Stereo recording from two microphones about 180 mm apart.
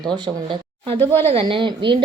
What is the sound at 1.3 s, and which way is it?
Speech, 30° right (ahead or behind).